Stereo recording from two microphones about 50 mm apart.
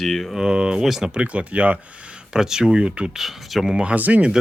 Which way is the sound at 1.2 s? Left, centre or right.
Right.